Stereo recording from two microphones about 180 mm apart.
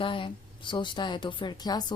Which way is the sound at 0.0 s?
30° left (ahead or behind).